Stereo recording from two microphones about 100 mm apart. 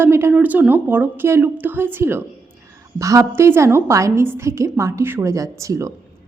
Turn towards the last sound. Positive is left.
turn(degrees=-30)  # may be behind; listen again after turning